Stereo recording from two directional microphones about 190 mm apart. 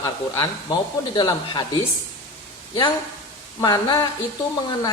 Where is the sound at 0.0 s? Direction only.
20° left (ahead or behind).